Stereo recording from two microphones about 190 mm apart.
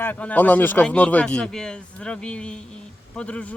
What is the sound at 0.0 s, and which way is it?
Speech, 10° left (ahead or behind).